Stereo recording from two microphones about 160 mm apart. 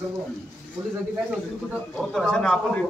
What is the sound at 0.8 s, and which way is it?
Speech, 20° right (ahead or behind).